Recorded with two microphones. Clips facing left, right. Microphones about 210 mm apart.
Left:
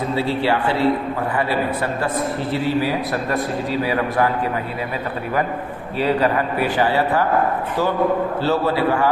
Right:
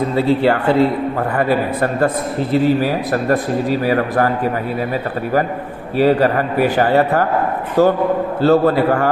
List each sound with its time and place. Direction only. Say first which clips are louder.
0.2 s speech: right 6 dB; 50° right (ahead or behind)
6.0 s speech: right 5 dB; 45° right (ahead or behind)